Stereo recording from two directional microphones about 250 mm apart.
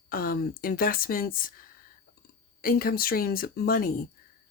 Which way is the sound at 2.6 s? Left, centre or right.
Left.